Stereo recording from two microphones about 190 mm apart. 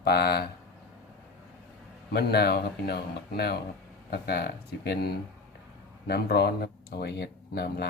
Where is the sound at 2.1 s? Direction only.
55° left (ahead or behind).